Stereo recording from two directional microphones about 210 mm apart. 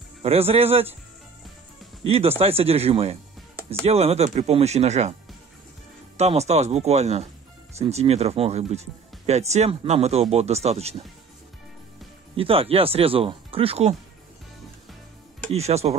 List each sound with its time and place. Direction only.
0.2 s speech: 30° right (ahead or behind)
2.0 s speech: 30° right (ahead or behind)
6.1 s speech: 30° right (ahead or behind)
12.4 s speech: 25° right (ahead or behind)
15.5 s speech: 30° right (ahead or behind)